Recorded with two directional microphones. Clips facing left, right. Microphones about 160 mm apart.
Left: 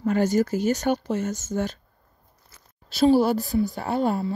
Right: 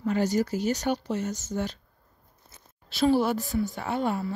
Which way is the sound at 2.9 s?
40° left (ahead or behind).